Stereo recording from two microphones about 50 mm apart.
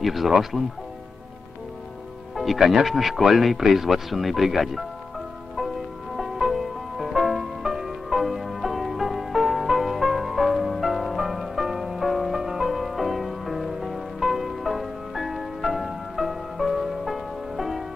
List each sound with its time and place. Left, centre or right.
0.0 s speech: centre
2.3 s speech: centre
6.1 s music: centre